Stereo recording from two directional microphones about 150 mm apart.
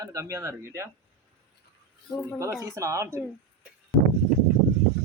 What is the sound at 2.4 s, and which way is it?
Speech, 20° right (ahead or behind).